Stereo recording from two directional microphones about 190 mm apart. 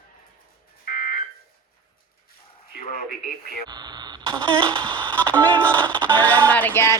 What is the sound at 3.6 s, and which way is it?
Speech, 20° right (ahead or behind).